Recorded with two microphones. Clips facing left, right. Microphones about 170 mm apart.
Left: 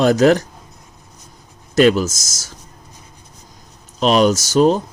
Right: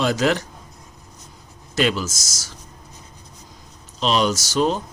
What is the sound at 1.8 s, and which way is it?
Speech, 45° left (ahead or behind).